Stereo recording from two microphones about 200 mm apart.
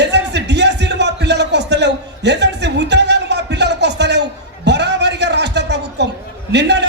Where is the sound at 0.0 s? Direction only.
60° right (ahead or behind).